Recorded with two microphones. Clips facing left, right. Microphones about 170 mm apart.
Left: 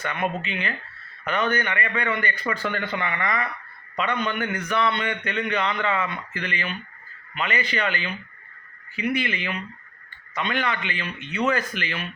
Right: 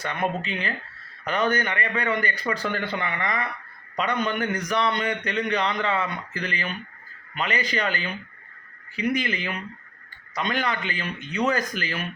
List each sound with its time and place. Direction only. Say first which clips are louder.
0.0 s a man's voice: even; 35° right (ahead or behind)